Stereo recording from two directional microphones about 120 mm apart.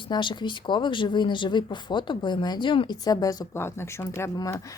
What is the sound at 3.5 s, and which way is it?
Speech, 20° left (ahead or behind).